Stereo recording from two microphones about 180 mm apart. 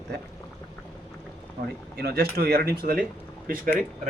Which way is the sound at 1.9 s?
60° right (ahead or behind).